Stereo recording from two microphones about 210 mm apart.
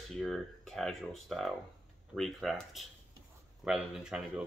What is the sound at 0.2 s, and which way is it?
Speech, centre (ahead or behind).